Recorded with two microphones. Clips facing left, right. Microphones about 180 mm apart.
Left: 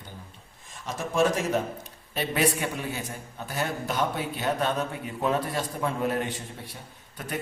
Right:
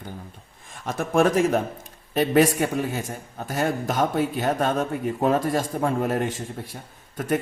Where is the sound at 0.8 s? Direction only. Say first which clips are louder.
Right 4 dB; 55° right (ahead or behind).